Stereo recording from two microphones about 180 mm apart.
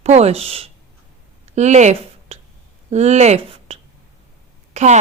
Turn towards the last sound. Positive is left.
turn(degrees=-40)  # may be behind; listen again after turning